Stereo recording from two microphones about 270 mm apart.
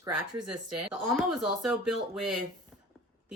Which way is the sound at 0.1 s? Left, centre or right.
Right.